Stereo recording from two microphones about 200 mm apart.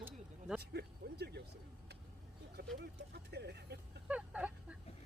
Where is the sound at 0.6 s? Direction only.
50° right (ahead or behind).